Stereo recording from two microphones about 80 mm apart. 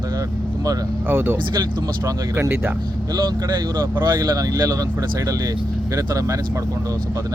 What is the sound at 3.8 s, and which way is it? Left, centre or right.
Speech, right.